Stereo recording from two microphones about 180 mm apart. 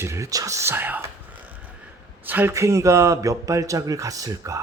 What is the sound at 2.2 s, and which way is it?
Speech, 10° right (ahead or behind).